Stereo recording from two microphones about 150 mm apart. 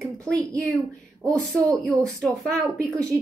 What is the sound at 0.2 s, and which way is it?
Speech, 20° right (ahead or behind).